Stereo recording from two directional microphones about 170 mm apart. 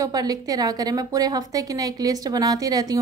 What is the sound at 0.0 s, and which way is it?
A woman's voice, 20° right (ahead or behind).